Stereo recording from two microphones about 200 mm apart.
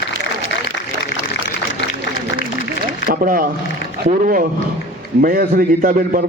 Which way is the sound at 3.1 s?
45° right (ahead or behind).